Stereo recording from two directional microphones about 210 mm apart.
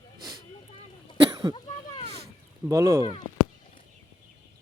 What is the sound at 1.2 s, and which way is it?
Cough, 20° right (ahead or behind).